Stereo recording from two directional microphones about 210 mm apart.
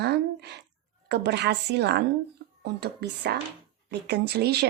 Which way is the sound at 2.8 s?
50° right (ahead or behind).